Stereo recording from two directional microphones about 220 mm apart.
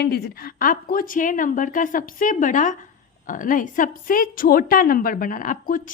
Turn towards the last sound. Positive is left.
turn(degrees=40)  # may be behind; listen again after turning